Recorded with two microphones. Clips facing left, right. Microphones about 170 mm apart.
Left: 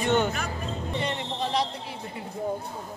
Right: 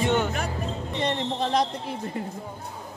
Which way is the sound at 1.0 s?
45° right (ahead or behind).